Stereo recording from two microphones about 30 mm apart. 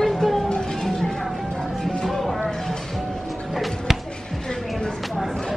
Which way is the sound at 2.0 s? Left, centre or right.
Centre.